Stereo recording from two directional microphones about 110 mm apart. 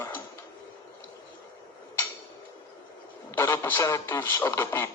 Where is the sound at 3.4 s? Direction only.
20° left (ahead or behind).